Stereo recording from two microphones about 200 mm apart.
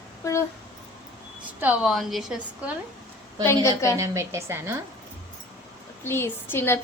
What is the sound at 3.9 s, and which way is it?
Speech, 15° right (ahead or behind).